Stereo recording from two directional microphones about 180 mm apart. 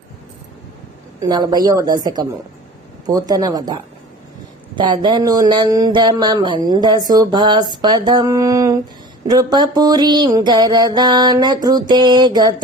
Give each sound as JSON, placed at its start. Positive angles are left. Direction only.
{"t": 1.2, "sound": "speech", "side_deg": -20}